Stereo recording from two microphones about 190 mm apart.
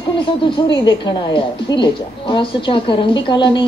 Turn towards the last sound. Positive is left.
turn(degrees=25)  # may be behind; listen again after turning